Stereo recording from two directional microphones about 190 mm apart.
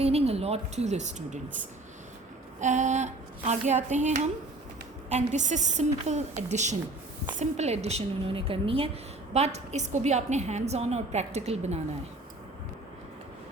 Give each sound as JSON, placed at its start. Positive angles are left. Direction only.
{"t": 0.0, "sound": "a woman's voice", "side_deg": -35}
{"t": 2.6, "sound": "a woman's voice", "side_deg": -40}